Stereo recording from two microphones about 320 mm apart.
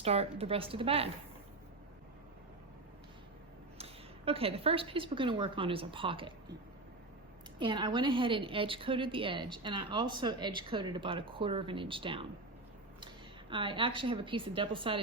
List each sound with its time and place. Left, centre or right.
0.0 s a woman's voice: centre
4.3 s a woman's voice: centre
7.6 s a woman's voice: centre
13.5 s a woman's voice: centre